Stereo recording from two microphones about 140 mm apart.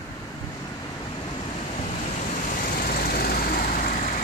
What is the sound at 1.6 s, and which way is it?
Vehicle, 50° left (ahead or behind).